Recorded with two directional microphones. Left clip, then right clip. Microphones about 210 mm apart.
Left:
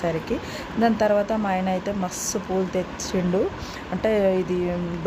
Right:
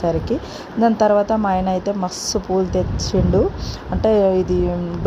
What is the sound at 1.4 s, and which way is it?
Speech, 15° right (ahead or behind).